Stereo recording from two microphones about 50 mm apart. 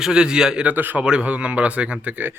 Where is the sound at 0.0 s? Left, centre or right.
Centre.